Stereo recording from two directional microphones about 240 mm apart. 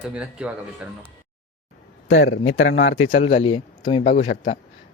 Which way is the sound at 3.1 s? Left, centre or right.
Left.